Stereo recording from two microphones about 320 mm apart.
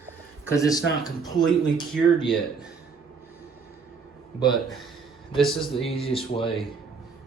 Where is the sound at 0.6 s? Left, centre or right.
Centre.